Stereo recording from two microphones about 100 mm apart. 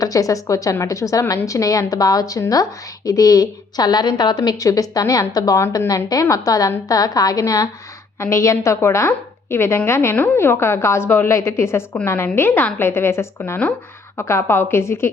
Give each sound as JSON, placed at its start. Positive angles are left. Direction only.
{"t": 0.0, "sound": "a woman's voice", "side_deg": 35}